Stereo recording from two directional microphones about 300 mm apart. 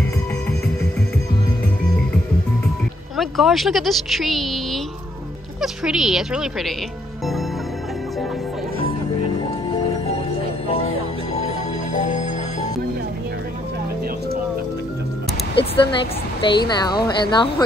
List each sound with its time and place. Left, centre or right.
3.2 s a woman's voice: centre
5.6 s a woman's voice: centre
11.9 s music: left
15.5 s speech: centre